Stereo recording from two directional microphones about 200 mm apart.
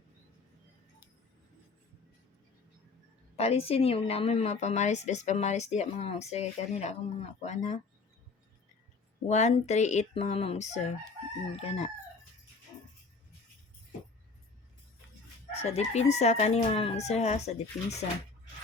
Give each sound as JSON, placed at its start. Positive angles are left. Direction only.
{"t": 3.3, "sound": "a woman's voice", "side_deg": 30}
{"t": 9.2, "sound": "a woman's voice", "side_deg": 35}
{"t": 15.7, "sound": "a woman's voice", "side_deg": 35}